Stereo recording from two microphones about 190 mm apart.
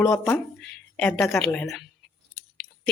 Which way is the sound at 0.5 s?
5° left (ahead or behind).